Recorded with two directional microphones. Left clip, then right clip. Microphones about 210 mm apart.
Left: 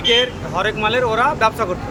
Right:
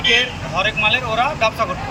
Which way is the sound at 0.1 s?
15° left (ahead or behind).